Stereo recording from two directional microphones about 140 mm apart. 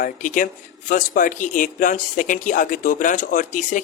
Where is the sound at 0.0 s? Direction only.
70° left (ahead or behind).